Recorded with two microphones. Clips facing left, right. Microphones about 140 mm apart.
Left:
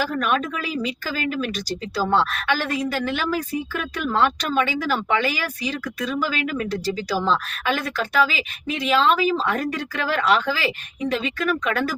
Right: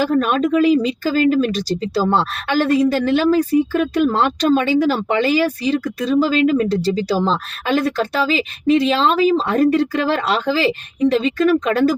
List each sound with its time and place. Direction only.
0.1 s speech: 35° right (ahead or behind)